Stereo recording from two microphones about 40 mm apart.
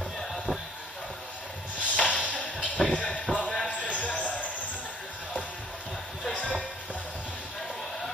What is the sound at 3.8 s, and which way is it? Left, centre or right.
Music, left.